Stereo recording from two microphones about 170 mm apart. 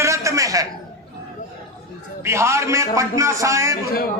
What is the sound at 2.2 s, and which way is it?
A man's voice, 15° right (ahead or behind).